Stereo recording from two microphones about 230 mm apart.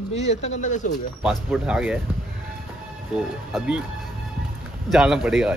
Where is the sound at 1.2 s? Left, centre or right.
Centre.